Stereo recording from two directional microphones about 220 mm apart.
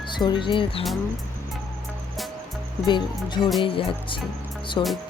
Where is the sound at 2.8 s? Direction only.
20° left (ahead or behind).